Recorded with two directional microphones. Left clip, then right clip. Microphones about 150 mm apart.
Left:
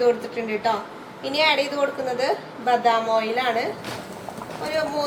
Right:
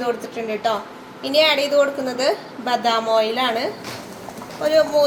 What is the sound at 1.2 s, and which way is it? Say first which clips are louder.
Speech: right 4 dB; 60° right (ahead or behind).